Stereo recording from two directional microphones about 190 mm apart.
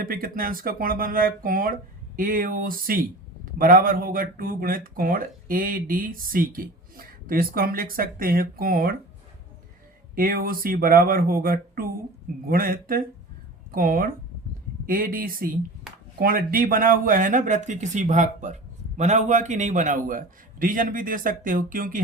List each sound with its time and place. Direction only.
0.0 s a man's voice: 50° right (ahead or behind)
10.2 s a man's voice: 50° right (ahead or behind)